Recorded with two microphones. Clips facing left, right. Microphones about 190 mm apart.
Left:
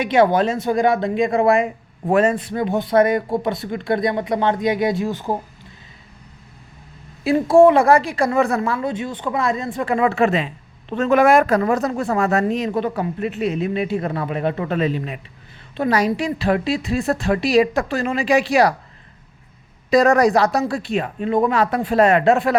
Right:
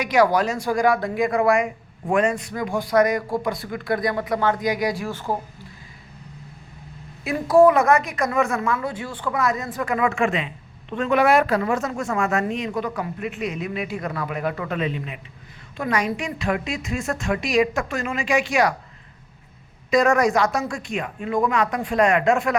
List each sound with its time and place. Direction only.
0.0 s speech: 25° left (ahead or behind)
7.3 s a woman's voice: 25° left (ahead or behind)
19.9 s a woman's voice: 35° left (ahead or behind)